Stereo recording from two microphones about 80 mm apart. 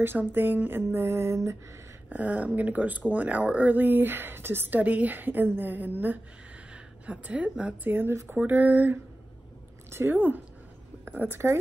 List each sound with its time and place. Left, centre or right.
0.0 s speech: right
2.0 s speech: centre
8.4 s speech: right